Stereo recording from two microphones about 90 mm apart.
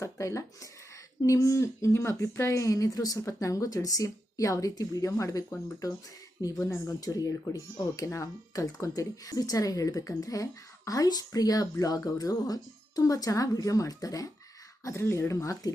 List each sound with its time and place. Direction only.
0.0 s speech: 35° left (ahead or behind)